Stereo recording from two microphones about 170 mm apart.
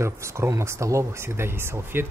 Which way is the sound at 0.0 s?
15° right (ahead or behind).